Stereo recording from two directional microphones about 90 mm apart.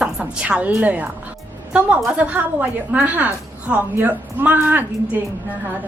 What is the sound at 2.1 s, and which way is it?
A woman's voice, 15° right (ahead or behind).